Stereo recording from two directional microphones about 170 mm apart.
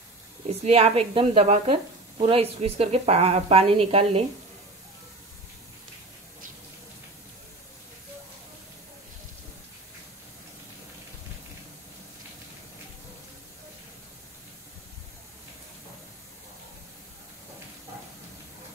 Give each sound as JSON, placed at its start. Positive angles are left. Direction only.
{"t": 0.7, "sound": "speech", "side_deg": -35}